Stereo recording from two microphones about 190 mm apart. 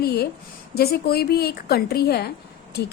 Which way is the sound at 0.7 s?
55° left (ahead or behind).